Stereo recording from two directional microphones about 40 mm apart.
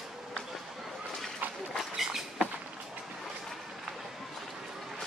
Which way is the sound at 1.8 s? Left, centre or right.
Centre.